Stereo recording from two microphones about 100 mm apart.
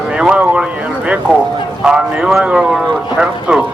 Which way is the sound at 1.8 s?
5° right (ahead or behind).